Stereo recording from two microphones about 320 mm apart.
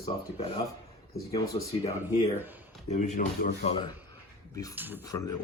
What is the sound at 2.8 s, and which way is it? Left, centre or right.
Speech, left.